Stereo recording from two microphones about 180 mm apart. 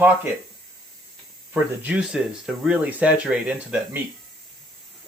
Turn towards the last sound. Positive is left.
turn(degrees=-5)  # may be behind; listen again after turning